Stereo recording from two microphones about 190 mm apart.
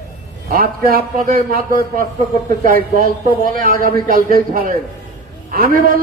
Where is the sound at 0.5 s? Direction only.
50° right (ahead or behind).